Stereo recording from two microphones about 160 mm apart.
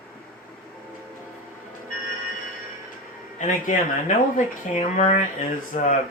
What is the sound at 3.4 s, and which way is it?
Speech, 55° left (ahead or behind).